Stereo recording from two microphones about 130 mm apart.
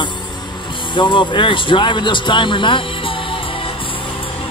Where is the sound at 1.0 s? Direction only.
40° left (ahead or behind).